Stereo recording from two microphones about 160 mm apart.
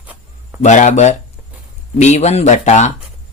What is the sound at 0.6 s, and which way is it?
Speech, 50° left (ahead or behind).